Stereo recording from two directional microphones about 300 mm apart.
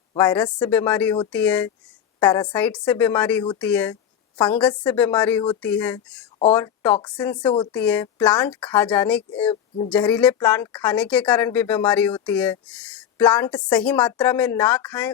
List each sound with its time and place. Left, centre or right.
0.1 s a woman's voice: centre
9.5 s speech: centre
9.9 s speech: centre